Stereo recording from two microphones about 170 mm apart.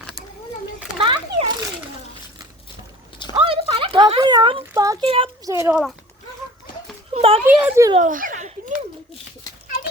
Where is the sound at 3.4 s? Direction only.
30° right (ahead or behind).